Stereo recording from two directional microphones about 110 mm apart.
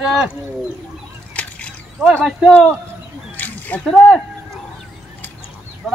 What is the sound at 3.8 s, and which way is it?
Speech, centre (ahead or behind).